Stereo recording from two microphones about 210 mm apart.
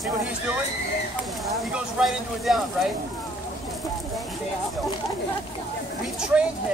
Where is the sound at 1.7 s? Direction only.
Centre (ahead or behind).